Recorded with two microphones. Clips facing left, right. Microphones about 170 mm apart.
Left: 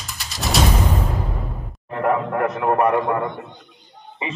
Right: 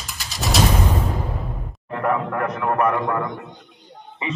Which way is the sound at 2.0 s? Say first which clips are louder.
Left 2 dB; 30° left (ahead or behind).